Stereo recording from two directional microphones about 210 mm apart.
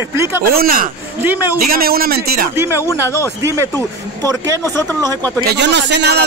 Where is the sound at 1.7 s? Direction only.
45° right (ahead or behind).